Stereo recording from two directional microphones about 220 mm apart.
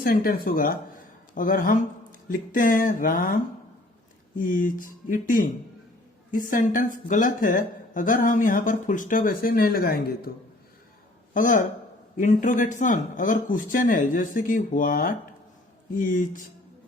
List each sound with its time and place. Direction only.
0.0 s speech: 40° left (ahead or behind)
4.4 s speech: 35° left (ahead or behind)
11.3 s speech: 35° left (ahead or behind)